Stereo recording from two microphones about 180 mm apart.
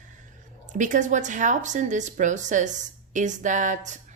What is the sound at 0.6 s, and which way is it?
Speech, 45° right (ahead or behind).